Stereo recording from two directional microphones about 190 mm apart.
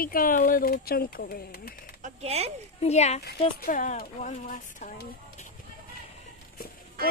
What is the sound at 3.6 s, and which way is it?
Speech, 45° left (ahead or behind).